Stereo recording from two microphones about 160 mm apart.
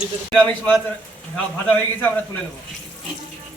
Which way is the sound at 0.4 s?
10° left (ahead or behind).